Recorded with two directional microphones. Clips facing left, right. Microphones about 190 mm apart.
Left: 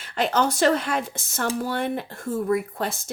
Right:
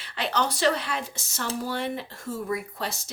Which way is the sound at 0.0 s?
45° left (ahead or behind).